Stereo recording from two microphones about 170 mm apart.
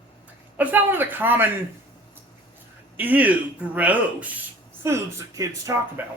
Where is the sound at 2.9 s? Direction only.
10° right (ahead or behind).